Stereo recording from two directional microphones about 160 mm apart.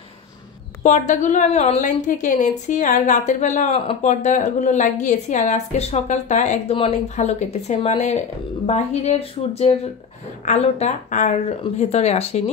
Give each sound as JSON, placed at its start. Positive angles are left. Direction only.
{"t": 0.8, "sound": "a woman's voice", "side_deg": 50}